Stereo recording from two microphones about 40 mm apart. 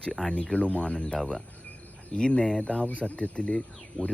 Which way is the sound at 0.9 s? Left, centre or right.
Centre.